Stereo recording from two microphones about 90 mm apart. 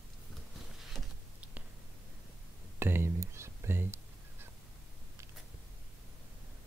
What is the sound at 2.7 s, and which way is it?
Music, 25° right (ahead or behind).